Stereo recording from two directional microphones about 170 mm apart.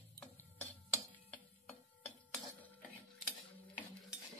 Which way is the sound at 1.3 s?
5° left (ahead or behind).